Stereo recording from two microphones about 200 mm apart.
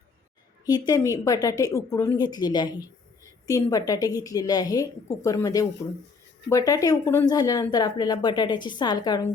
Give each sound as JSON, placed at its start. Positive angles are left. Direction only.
{"t": 0.6, "sound": "a woman's voice", "side_deg": 20}